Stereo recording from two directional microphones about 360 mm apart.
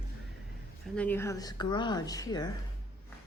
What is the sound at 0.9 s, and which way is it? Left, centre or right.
A woman's voice, centre.